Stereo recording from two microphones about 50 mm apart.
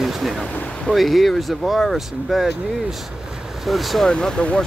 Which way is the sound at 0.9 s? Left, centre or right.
Centre.